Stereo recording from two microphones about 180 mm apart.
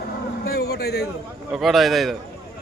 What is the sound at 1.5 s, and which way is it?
Speech, centre (ahead or behind).